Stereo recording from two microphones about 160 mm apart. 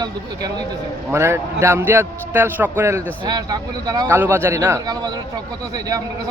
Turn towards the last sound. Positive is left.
turn(degrees=-20)  # may be behind; listen again after turning